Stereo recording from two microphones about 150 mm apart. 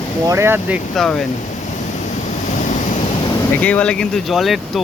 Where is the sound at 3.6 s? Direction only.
10° left (ahead or behind).